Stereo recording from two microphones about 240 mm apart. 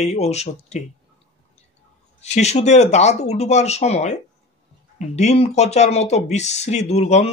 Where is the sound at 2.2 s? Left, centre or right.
Left.